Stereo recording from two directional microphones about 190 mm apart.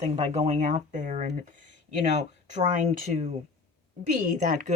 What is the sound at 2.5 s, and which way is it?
Speech, 40° right (ahead or behind).